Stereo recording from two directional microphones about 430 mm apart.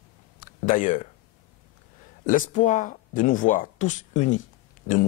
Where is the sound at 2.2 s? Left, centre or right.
Centre.